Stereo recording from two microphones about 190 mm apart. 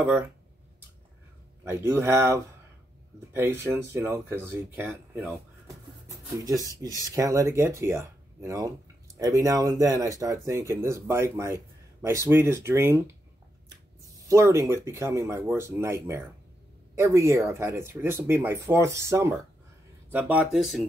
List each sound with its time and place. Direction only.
1.6 s speech: 15° right (ahead or behind)
6.3 s speech: 20° right (ahead or behind)
14.2 s speech: 15° right (ahead or behind)